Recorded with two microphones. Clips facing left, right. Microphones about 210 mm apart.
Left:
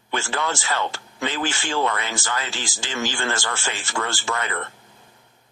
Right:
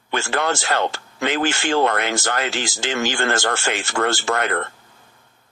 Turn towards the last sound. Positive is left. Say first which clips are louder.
# right 6 dB
turn(degrees=-60)  # may be behind; listen again after turning